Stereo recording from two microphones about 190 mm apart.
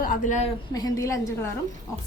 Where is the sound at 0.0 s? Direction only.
45° left (ahead or behind).